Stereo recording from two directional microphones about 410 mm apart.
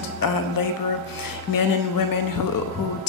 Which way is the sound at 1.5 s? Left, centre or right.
Left.